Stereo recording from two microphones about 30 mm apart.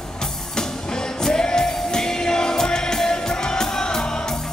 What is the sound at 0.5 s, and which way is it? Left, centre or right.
Music, left.